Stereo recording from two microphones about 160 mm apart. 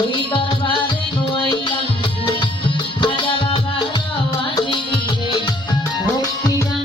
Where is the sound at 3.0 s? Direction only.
30° left (ahead or behind).